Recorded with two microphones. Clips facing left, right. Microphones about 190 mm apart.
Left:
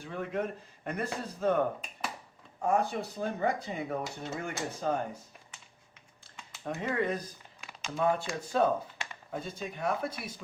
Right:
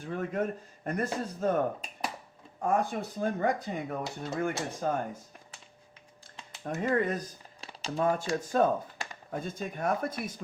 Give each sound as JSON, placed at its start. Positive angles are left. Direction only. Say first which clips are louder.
{"t": 0.0, "sound": "a sound", "louder": "right 2 dB", "side_deg": -45}
{"t": 0.9, "sound": "speech", "louder": "right 3 dB", "side_deg": -45}
{"t": 2.6, "sound": "speech", "louder": "even", "side_deg": -50}
{"t": 6.7, "sound": "speech", "louder": "right 3 dB", "side_deg": -45}